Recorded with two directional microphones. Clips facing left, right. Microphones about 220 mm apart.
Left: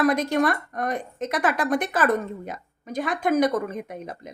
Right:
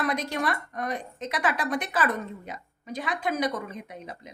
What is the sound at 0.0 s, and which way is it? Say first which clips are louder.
A woman's voice: left 7 dB; 50° left (ahead or behind).